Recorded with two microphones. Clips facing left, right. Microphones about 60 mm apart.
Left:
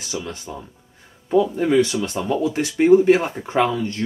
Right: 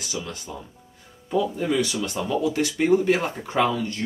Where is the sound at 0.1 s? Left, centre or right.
Left.